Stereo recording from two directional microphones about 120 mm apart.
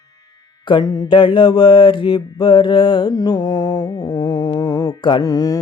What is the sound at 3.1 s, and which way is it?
Music, 30° left (ahead or behind).